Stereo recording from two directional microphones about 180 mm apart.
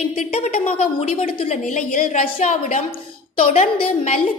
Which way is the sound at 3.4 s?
30° left (ahead or behind).